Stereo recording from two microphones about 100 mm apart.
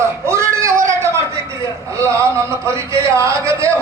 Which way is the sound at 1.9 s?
30° right (ahead or behind).